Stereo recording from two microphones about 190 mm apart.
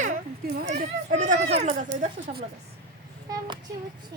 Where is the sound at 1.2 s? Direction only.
40° right (ahead or behind).